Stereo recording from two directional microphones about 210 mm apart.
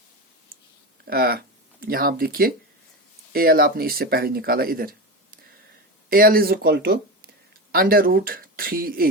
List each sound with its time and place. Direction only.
1.0 s speech: 45° right (ahead or behind)